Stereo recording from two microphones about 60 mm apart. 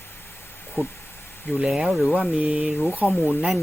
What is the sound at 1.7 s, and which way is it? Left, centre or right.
Speech, centre.